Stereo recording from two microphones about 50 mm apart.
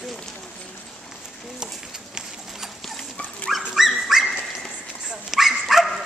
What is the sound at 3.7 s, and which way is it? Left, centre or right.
Dog, centre.